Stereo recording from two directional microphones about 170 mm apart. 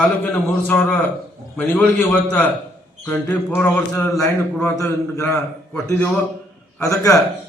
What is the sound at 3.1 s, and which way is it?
A man's voice, 10° left (ahead or behind).